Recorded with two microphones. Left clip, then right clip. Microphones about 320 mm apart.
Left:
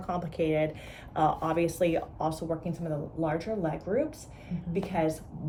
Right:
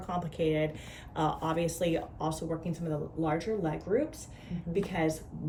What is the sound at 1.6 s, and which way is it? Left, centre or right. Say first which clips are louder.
Speech: left 3 dB; centre.